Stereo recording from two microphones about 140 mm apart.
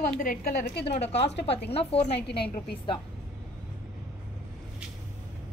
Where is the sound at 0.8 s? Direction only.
45° left (ahead or behind).